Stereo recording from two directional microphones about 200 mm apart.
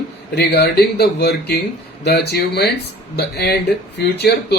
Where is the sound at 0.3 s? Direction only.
55° left (ahead or behind).